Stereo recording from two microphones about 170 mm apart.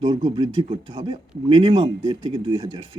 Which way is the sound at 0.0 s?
25° right (ahead or behind).